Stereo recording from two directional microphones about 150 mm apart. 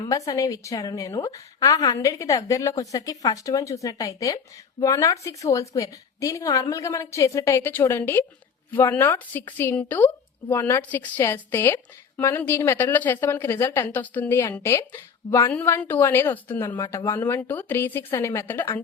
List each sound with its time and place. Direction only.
0.0 s a woman's voice: 20° left (ahead or behind)
16.6 s a woman's voice: 25° left (ahead or behind)
17.0 s a woman's voice: 15° left (ahead or behind)